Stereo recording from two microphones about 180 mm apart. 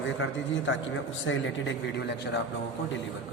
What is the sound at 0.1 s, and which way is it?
Speech, 90° left.